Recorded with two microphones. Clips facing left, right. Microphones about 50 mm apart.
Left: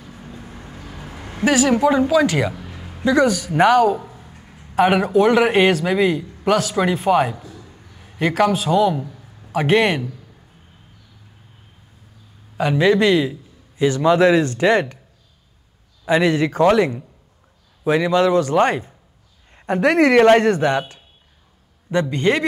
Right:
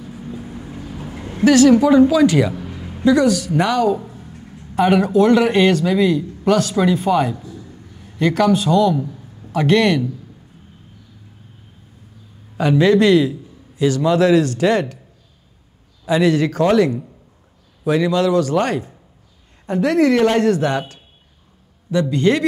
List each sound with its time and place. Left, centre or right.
0.1 s vehicle: centre
1.3 s speech: centre
2.5 s music: centre
3.1 s speech: centre
3.3 s a man's voice: left
3.8 s speech: centre
4.2 s a sound: centre
5.1 s a man's voice: centre
12.5 s speech: centre
13.7 s a man's voice: left
16.1 s a man's voice: left
22.1 s speech: centre